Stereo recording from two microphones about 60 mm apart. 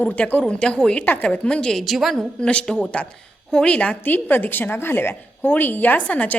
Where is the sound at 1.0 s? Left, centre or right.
Left.